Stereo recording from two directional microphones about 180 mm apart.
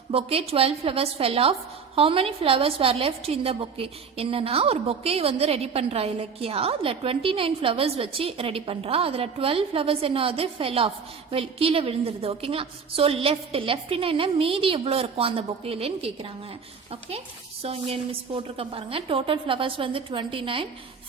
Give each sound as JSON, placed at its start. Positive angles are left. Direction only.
{"t": 0.1, "sound": "a woman's voice", "side_deg": -30}
{"t": 17.6, "sound": "a woman's voice", "side_deg": -30}